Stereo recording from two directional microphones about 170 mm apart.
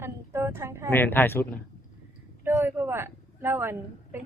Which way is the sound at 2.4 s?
10° right (ahead or behind).